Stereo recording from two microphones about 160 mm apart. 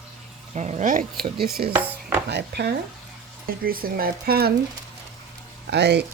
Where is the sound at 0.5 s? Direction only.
45° right (ahead or behind).